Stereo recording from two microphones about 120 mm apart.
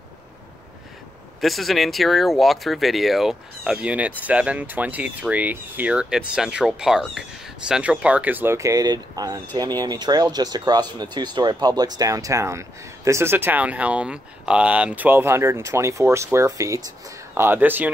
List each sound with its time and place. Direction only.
1.4 s speech: centre (ahead or behind); by 16.9 s 25° right (ahead or behind)
17.3 s speech: 15° right (ahead or behind)